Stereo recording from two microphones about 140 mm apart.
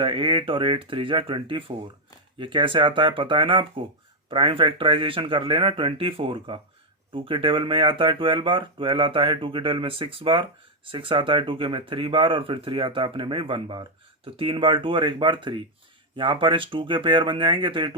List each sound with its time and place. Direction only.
0.0 s speech: 35° right (ahead or behind)